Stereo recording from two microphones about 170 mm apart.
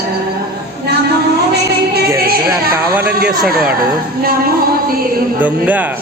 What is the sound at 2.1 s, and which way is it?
Music, 65° right (ahead or behind).